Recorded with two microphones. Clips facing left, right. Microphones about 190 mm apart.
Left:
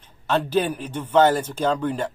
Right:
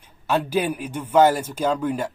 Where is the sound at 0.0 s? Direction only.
10° right (ahead or behind).